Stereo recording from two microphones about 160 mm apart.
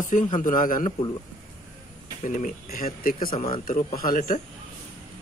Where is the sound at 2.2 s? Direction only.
55° left (ahead or behind).